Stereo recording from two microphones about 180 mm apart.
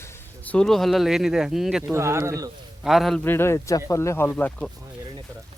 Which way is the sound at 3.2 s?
15° left (ahead or behind).